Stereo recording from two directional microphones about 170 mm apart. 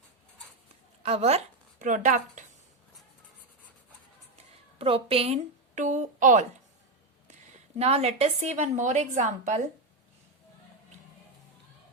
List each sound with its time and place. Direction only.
1.0 s a woman's voice: 40° right (ahead or behind)
4.8 s a woman's voice: 30° right (ahead or behind)
7.8 s a woman's voice: 35° right (ahead or behind)